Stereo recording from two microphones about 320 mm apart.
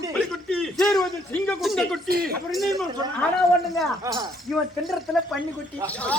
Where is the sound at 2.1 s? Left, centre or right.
Right.